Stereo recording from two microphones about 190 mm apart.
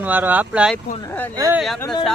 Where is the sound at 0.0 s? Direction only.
10° right (ahead or behind).